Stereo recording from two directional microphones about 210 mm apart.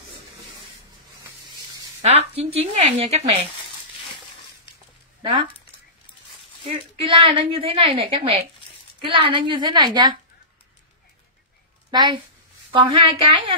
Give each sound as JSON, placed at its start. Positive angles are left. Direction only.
{"t": 2.0, "sound": "a woman's voice", "side_deg": -30}
{"t": 6.6, "sound": "a woman's voice", "side_deg": -25}
{"t": 11.9, "sound": "a woman's voice", "side_deg": -20}